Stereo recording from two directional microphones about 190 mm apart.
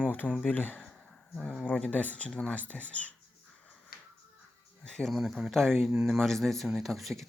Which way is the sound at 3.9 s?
50° left (ahead or behind).